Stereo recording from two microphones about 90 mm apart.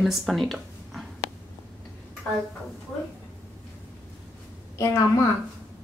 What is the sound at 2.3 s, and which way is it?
Speech, 15° left (ahead or behind).